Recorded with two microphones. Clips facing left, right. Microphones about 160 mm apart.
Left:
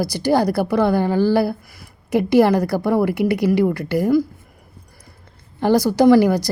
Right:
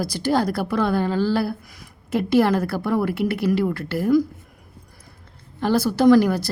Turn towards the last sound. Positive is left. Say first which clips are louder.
# left 2 dB
turn(degrees=10)  # may be behind; listen again after turning